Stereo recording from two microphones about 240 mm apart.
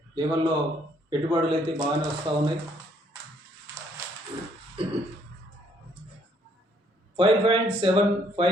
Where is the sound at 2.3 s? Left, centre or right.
Centre.